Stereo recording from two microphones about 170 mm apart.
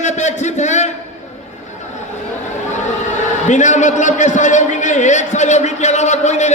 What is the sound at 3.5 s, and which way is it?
A man's voice, 45° left (ahead or behind).